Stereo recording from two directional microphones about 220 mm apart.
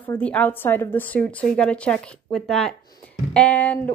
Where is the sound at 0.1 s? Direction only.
5° left (ahead or behind).